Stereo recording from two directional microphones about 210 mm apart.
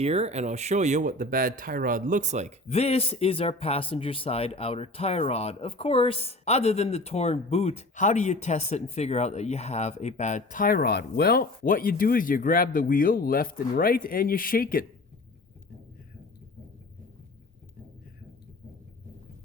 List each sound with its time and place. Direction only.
0.0 s speech: 30° right (ahead or behind)
2.6 s speech: 30° left (ahead or behind)